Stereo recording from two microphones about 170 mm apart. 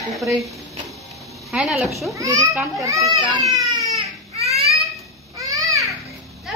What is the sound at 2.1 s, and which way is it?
A child's voice, 20° right (ahead or behind).